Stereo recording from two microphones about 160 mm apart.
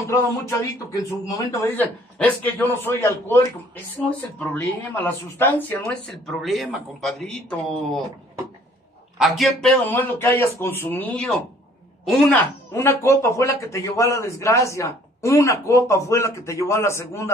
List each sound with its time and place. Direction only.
0.1 s a man's voice: 20° left (ahead or behind)
6.2 s a man's voice: centre (ahead or behind)
9.2 s a man's voice: centre (ahead or behind)
12.7 s a man's voice: 15° left (ahead or behind)